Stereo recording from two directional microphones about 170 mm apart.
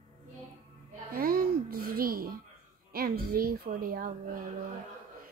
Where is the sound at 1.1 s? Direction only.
60° right (ahead or behind).